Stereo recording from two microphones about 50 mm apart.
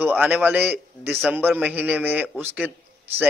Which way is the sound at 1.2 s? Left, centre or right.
Right.